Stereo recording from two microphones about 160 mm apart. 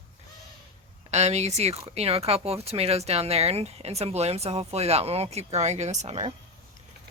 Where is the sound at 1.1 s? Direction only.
45° right (ahead or behind).